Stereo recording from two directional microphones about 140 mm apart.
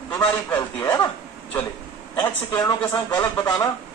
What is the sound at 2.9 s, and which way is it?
Speech, 30° left (ahead or behind).